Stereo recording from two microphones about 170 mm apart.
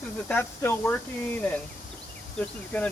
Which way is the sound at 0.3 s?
10° left (ahead or behind).